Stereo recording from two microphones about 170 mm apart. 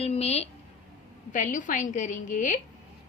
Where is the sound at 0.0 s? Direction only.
40° left (ahead or behind).